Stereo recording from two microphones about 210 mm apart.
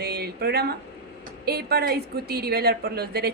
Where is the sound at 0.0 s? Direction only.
50° right (ahead or behind).